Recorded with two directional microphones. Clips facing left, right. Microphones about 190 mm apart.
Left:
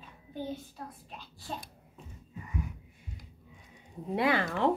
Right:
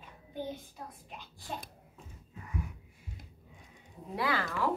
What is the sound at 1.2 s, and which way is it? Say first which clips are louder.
Speech: left 1 dB; 15° right (ahead or behind).